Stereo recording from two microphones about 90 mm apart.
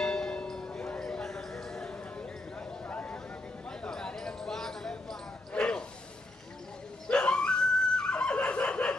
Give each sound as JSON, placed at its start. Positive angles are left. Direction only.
{"t": 0.0, "sound": "church bell", "side_deg": 5}
{"t": 2.9, "sound": "a sound", "side_deg": 15}
{"t": 7.1, "sound": "snicker", "side_deg": 10}